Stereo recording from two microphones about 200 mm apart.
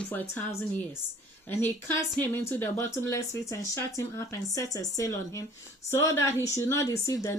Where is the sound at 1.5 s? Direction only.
10° left (ahead or behind).